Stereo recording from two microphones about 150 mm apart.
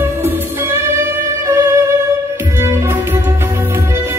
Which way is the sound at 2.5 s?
20° right (ahead or behind).